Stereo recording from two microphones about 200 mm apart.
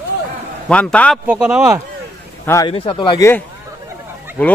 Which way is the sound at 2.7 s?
25° left (ahead or behind).